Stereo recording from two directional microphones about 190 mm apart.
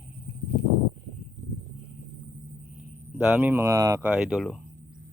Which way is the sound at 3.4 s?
15° right (ahead or behind).